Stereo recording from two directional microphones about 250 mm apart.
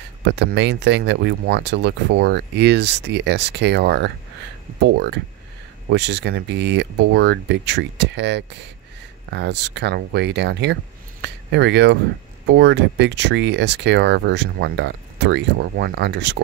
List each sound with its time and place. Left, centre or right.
0.3 s speech: right